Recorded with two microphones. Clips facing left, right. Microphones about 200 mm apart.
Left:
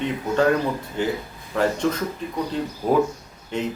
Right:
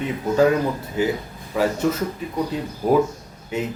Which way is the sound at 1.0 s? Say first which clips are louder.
Right 5 dB; 5° right (ahead or behind).